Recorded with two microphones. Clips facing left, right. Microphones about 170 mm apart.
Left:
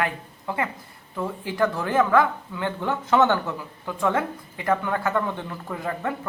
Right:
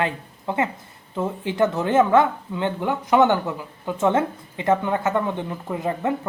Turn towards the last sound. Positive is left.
turn(degrees=-20)  # may be behind; listen again after turning